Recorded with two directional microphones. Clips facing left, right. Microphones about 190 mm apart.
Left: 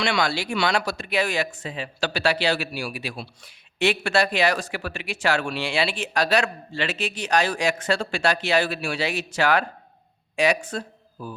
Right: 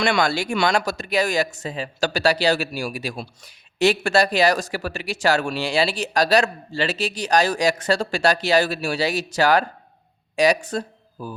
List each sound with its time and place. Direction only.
0.0 s speech: 50° right (ahead or behind)